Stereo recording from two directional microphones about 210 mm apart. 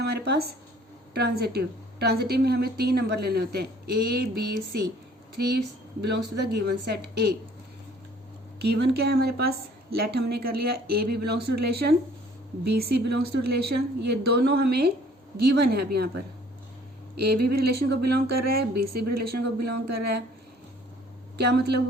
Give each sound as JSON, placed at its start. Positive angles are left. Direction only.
{"t": 0.0, "sound": "a sound", "side_deg": -50}
{"t": 1.1, "sound": "a woman's voice", "side_deg": -50}
{"t": 5.5, "sound": "a woman's voice", "side_deg": -55}
{"t": 8.5, "sound": "a woman's voice", "side_deg": -50}
{"t": 21.3, "sound": "a woman's voice", "side_deg": -50}